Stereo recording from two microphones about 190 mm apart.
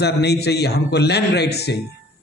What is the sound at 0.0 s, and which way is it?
A man's voice, 60° left (ahead or behind).